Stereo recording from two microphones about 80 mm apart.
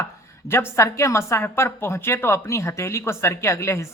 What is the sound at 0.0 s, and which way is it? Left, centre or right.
A woman's voice, left.